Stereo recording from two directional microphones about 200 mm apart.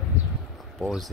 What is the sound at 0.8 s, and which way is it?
Speech, centre (ahead or behind).